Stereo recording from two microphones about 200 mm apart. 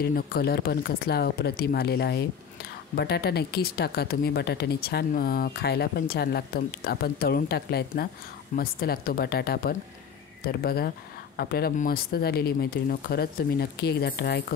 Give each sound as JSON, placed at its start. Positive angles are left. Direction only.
{"t": 0.0, "sound": "speech", "side_deg": 50}